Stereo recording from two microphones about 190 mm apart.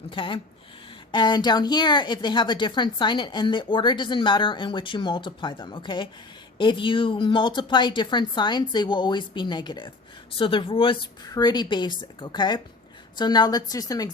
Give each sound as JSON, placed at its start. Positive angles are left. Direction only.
{"t": 0.1, "sound": "a woman's voice", "side_deg": 25}